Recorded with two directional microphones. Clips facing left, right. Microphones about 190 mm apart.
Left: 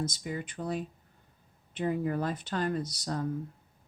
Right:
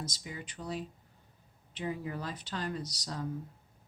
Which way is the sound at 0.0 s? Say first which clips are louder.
Left 8 dB; 50° left (ahead or behind).